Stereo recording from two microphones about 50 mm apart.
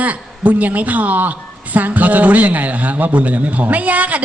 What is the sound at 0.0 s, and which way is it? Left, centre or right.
A woman's voice, right.